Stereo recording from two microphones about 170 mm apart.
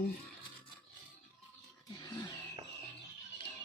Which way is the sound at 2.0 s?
20° left (ahead or behind).